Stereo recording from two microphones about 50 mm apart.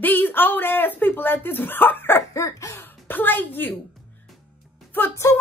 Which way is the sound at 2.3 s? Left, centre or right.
Left.